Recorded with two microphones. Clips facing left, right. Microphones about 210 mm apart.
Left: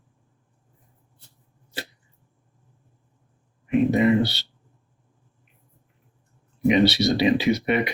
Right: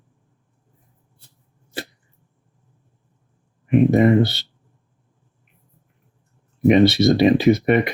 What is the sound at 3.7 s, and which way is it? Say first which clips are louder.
Speech: right 4 dB; 50° right (ahead or behind).